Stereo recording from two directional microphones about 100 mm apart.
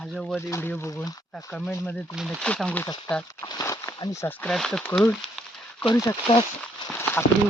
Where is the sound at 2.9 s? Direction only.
45° left (ahead or behind).